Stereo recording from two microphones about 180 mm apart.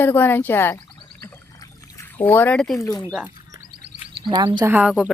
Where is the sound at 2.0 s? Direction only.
10° left (ahead or behind).